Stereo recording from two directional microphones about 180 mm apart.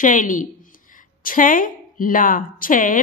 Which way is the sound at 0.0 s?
45° left (ahead or behind).